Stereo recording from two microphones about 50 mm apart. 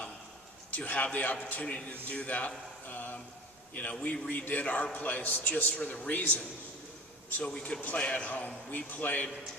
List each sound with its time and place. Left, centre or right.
0.7 s a man's voice: left
2.8 s a sound: left
4.0 s a man's voice: left
5.7 s a man's voice: left
7.4 s a man's voice: centre